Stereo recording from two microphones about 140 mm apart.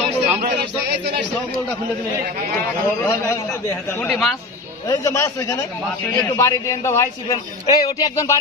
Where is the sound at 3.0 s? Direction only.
20° left (ahead or behind).